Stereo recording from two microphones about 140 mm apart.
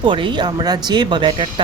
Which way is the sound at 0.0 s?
35° right (ahead or behind).